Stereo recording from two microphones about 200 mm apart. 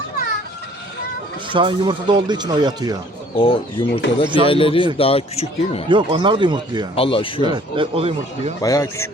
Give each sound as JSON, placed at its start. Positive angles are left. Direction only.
{"t": 1.5, "sound": "speech", "side_deg": -25}
{"t": 3.3, "sound": "speech", "side_deg": 25}
{"t": 5.9, "sound": "speech", "side_deg": -25}
{"t": 6.9, "sound": "speech", "side_deg": 25}
{"t": 7.4, "sound": "speech", "side_deg": -25}
{"t": 8.6, "sound": "speech", "side_deg": 15}